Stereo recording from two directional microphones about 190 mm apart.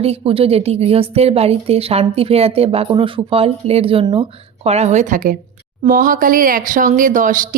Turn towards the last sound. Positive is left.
turn(degrees=-45)  # may be behind; listen again after turning